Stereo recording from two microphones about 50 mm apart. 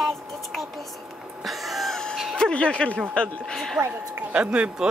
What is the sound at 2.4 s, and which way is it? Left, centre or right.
Speech, left.